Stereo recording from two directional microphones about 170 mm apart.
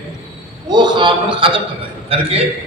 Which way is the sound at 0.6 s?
25° right (ahead or behind).